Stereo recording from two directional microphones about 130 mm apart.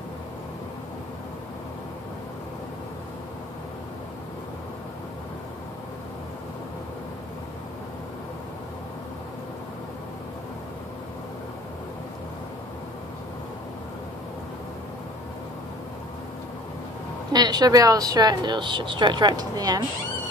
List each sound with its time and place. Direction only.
17.3 s speech: 30° right (ahead or behind)